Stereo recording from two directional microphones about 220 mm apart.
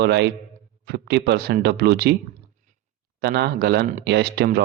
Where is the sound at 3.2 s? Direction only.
45° right (ahead or behind).